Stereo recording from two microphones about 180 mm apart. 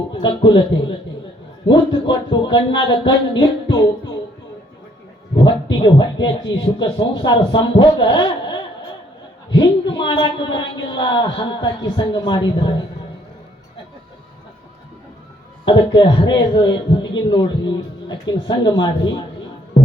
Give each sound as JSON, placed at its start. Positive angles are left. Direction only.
{"t": 0.1, "sound": "speech", "side_deg": 25}
{"t": 1.6, "sound": "speech", "side_deg": 25}
{"t": 5.4, "sound": "speech", "side_deg": 25}
{"t": 15.6, "sound": "speech", "side_deg": 25}